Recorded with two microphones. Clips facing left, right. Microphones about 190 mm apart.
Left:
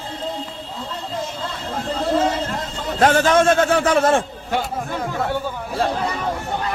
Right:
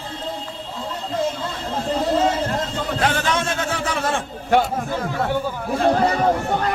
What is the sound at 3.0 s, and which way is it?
A man's voice, 45° left (ahead or behind).